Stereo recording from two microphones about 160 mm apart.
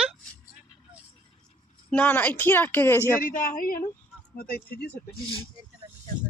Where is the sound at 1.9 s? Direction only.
10° left (ahead or behind).